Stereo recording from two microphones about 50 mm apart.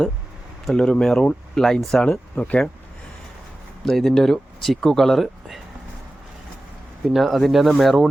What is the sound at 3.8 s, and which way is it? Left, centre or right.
Speech, centre.